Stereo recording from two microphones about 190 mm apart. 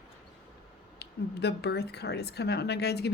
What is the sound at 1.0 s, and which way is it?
A woman's voice, 60° left (ahead or behind).